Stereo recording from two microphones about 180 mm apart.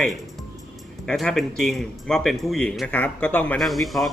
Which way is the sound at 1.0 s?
Centre (ahead or behind).